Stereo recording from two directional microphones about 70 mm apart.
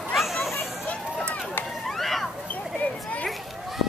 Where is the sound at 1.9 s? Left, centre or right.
Centre.